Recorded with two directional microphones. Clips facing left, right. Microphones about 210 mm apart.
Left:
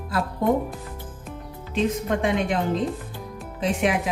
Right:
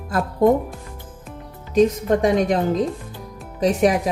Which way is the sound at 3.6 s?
40° right (ahead or behind).